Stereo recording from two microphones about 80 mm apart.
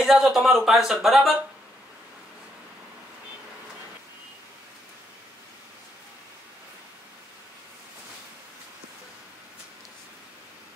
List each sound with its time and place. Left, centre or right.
0.0 s speech: centre